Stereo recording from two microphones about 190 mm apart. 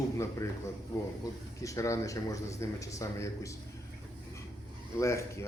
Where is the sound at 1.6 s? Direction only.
15° left (ahead or behind).